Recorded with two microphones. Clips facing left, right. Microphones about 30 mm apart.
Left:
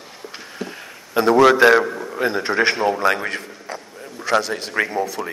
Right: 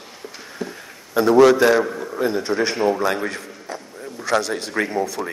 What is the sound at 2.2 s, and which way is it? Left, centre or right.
A man's voice, left.